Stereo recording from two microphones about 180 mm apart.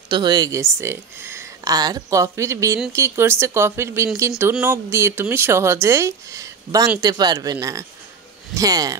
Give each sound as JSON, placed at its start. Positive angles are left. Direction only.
{"t": 0.1, "sound": "a man's voice", "side_deg": -25}
{"t": 8.5, "sound": "a man's voice", "side_deg": -20}